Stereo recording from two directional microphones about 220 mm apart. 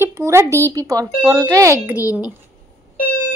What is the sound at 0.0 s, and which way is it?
Speech, 15° right (ahead or behind).